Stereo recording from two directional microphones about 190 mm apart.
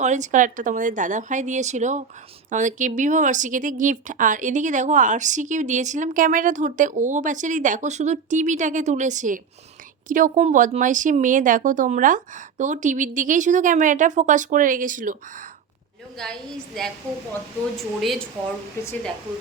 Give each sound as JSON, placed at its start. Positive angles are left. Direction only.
{"t": 0.0, "sound": "speech", "side_deg": -40}
{"t": 17.7, "sound": "speech", "side_deg": 0}